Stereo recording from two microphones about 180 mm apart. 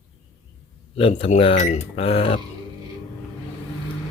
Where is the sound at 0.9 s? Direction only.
35° left (ahead or behind).